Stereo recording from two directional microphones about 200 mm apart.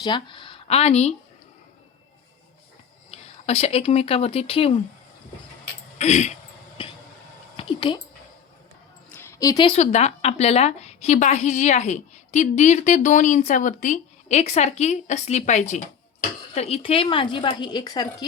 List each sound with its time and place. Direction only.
0.0 s speech: 25° left (ahead or behind)
3.1 s speech: 30° left (ahead or behind)
6.0 s speech: 35° left (ahead or behind)
7.5 s speech: 25° left (ahead or behind)
9.1 s speech: 15° left (ahead or behind)